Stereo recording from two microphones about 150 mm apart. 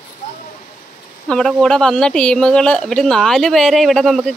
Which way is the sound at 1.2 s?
5° left (ahead or behind).